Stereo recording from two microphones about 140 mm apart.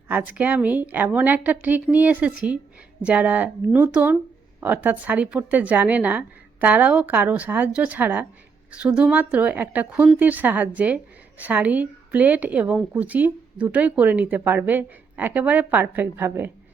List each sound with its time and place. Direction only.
0.1 s a woman's voice: 10° right (ahead or behind)